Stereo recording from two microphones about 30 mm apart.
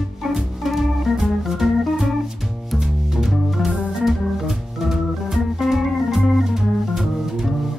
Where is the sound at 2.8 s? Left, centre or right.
Centre.